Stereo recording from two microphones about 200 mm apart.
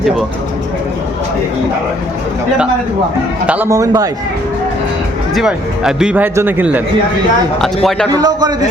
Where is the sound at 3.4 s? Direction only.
10° right (ahead or behind).